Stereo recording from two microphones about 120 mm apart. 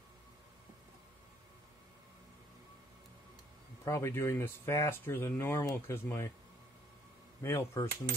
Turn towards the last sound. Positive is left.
turn(degrees=25)  # may be behind; listen again after turning